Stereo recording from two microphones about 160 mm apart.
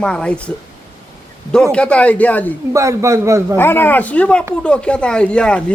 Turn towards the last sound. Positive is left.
turn(degrees=5)  # may be behind; listen again after turning